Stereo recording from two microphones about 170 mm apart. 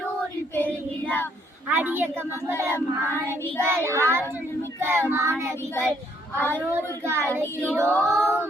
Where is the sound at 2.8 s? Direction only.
15° left (ahead or behind).